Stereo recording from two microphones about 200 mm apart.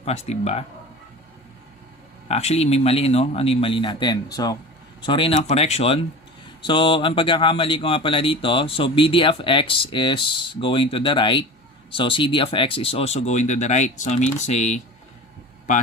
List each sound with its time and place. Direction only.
0.0 s speech: 30° left (ahead or behind)
2.2 s speech: 30° left (ahead or behind)